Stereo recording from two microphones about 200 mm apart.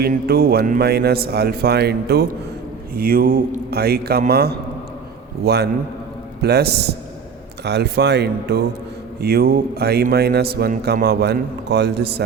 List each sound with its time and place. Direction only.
0.0 s a man's voice: 50° right (ahead or behind)